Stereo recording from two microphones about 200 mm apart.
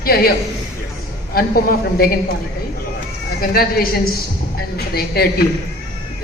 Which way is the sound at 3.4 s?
45° left (ahead or behind).